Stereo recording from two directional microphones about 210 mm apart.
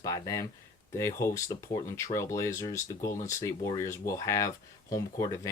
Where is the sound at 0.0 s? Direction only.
15° left (ahead or behind).